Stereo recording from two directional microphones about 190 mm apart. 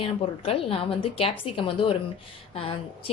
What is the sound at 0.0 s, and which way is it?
A woman's voice, 30° left (ahead or behind).